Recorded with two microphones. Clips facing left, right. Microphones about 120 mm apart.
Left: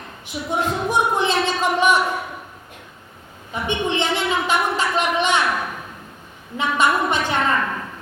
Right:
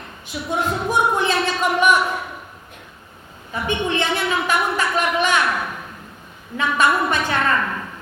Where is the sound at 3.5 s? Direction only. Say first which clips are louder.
Even; 20° left (ahead or behind).